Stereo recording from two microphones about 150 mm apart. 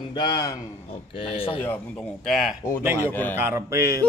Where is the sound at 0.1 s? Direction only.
30° left (ahead or behind).